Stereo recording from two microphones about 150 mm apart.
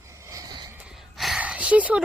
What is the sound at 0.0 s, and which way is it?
Cricket, 20° right (ahead or behind).